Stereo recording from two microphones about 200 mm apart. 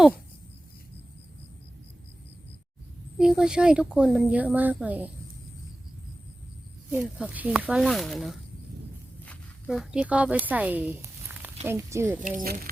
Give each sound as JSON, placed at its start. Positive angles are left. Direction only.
{"t": 3.2, "sound": "a woman's voice", "side_deg": -5}
{"t": 6.9, "sound": "a woman's voice", "side_deg": -5}
{"t": 9.2, "sound": "a sound", "side_deg": 5}
{"t": 11.6, "sound": "speech", "side_deg": -10}
{"t": 12.4, "sound": "speech", "side_deg": -45}